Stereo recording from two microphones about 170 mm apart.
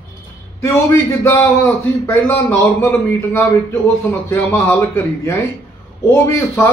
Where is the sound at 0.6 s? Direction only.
20° left (ahead or behind).